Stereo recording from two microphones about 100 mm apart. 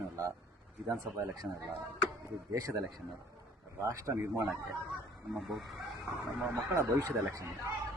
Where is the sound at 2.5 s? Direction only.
35° right (ahead or behind).